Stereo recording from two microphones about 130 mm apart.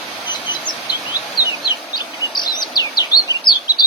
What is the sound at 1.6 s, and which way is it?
Bird vocalization, 35° left (ahead or behind).